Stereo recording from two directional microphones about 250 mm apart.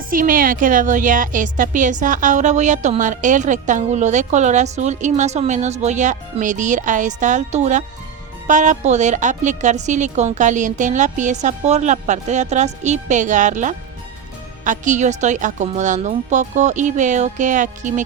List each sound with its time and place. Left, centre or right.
0.1 s a woman's voice: right